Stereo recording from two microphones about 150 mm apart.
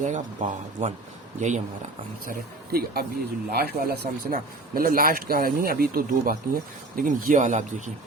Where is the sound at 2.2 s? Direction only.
90° right; by 7.9 s 55° right (ahead or behind).